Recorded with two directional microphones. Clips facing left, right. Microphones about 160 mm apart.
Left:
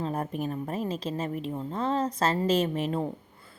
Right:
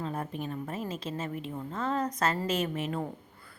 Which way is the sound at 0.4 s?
35° left (ahead or behind).